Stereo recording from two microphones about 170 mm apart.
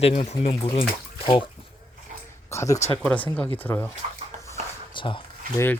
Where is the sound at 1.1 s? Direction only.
30° left (ahead or behind).